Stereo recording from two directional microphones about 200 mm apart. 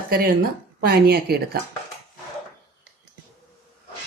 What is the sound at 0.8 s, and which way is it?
Speech, 50° right (ahead or behind).